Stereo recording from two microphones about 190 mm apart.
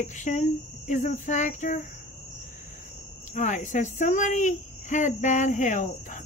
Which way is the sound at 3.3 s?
40° left (ahead or behind).